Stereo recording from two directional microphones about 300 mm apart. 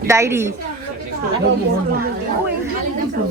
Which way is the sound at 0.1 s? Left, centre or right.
Centre.